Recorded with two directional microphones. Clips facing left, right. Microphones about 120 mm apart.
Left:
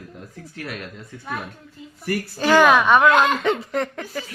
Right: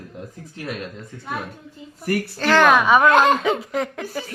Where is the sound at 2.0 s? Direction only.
60° right (ahead or behind).